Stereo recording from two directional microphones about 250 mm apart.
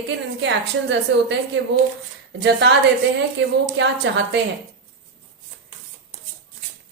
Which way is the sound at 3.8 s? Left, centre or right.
Right.